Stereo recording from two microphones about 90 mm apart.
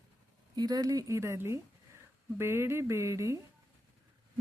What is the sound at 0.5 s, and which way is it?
Speech, 50° right (ahead or behind).